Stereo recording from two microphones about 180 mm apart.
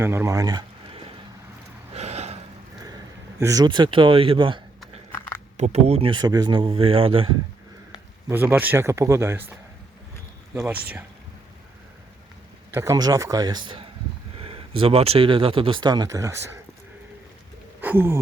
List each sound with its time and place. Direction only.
0.0 s speech: 15° right (ahead or behind)
1.9 s gasp: 35° right (ahead or behind)
3.4 s speech: 20° right (ahead or behind)
5.5 s speech: 40° right (ahead or behind)
8.3 s speech: 10° right (ahead or behind)
10.5 s speech: 10° right (ahead or behind)
12.7 s speech: 15° right (ahead or behind)
17.7 s a sound: 10° right (ahead or behind)